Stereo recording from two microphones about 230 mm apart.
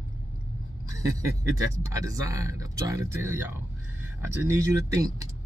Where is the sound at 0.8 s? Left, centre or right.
Centre.